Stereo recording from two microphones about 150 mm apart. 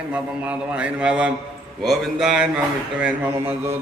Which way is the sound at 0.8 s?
5° right (ahead or behind).